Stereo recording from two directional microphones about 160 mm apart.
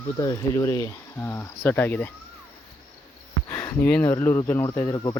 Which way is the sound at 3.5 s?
10° left (ahead or behind).